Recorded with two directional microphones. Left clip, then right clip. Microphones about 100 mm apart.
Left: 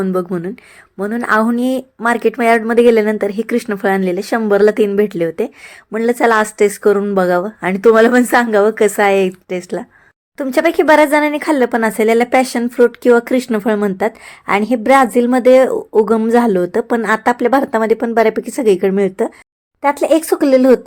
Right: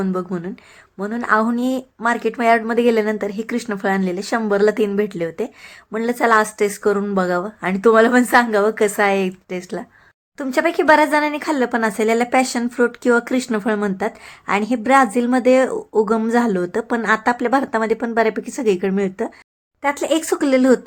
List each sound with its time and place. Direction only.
0.0 s a woman's voice: 30° left (ahead or behind)